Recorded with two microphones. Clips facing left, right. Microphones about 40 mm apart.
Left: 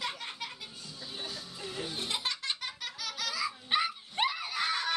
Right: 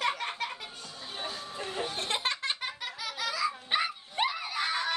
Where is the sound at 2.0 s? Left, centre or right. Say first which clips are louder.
Right 3 dB; right.